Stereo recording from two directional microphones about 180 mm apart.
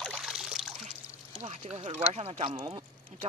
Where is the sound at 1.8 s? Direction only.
40° right (ahead or behind).